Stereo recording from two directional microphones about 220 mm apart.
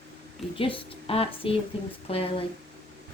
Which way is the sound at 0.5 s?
25° left (ahead or behind).